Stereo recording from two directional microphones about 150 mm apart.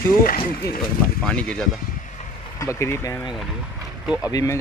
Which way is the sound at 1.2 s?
5° left (ahead or behind).